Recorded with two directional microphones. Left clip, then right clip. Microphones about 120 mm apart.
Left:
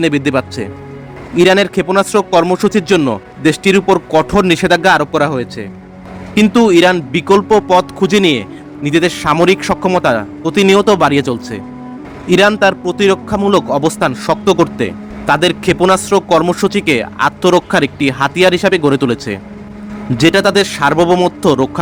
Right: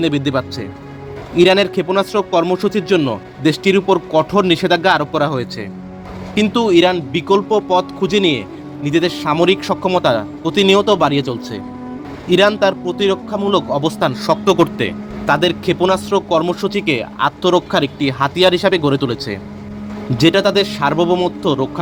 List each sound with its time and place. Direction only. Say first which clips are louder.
0.0 s speech: left 4 dB; 25° left (ahead or behind); by 21.7 s 45° left (ahead or behind)